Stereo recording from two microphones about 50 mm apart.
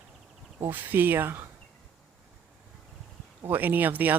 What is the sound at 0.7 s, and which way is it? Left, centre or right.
Speech, right.